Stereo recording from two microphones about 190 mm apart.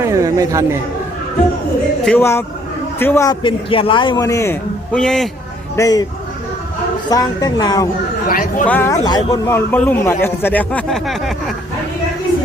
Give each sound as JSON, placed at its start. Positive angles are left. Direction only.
{"t": 0.0, "sound": "chatter", "side_deg": -15}
{"t": 2.0, "sound": "a man's voice", "side_deg": 10}
{"t": 3.4, "sound": "a man's voice", "side_deg": 30}
{"t": 5.7, "sound": "a man's voice", "side_deg": 20}
{"t": 7.1, "sound": "speech", "side_deg": 20}
{"t": 8.3, "sound": "speech", "side_deg": 45}
{"t": 8.6, "sound": "a man's voice", "side_deg": 10}